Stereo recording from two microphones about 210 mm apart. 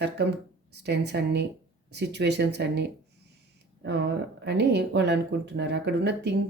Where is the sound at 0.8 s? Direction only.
55° right (ahead or behind).